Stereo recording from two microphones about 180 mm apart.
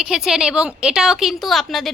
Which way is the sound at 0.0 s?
5° right (ahead or behind).